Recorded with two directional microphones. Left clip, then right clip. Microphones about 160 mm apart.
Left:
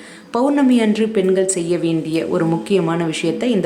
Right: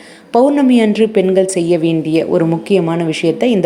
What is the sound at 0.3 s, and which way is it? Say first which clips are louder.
A woman's voice: right 5 dB; 20° right (ahead or behind).